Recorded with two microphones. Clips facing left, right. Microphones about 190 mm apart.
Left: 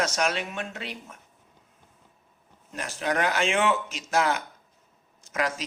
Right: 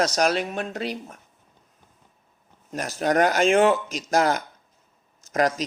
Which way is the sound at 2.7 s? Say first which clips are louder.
Right 6 dB; 40° right (ahead or behind).